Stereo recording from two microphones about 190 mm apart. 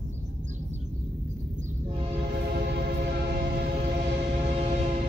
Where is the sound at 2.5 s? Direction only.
55° right (ahead or behind).